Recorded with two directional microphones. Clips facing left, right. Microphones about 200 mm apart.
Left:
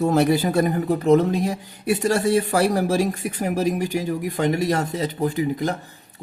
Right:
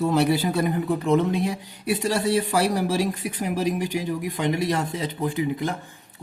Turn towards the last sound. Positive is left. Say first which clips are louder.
# left 3 dB
turn(degrees=40)  # may be behind; listen again after turning